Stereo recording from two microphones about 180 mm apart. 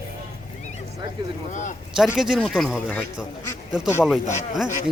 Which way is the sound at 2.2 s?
Centre (ahead or behind).